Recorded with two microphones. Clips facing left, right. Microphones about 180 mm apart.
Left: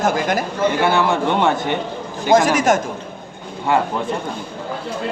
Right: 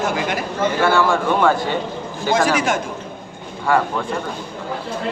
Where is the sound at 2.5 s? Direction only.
45° left (ahead or behind).